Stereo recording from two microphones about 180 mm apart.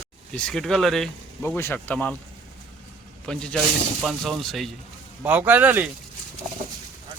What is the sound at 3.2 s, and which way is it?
A man's voice, 5° left (ahead or behind).